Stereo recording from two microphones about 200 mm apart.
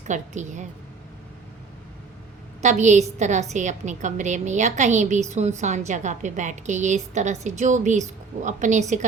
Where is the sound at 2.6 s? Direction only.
35° right (ahead or behind).